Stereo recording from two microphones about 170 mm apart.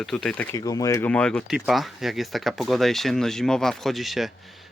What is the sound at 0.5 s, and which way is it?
Speech, 20° left (ahead or behind).